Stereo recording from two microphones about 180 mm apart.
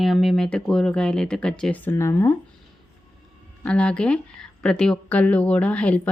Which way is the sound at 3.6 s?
5° left (ahead or behind).